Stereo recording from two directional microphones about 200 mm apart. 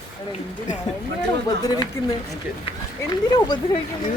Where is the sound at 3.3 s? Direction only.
20° left (ahead or behind).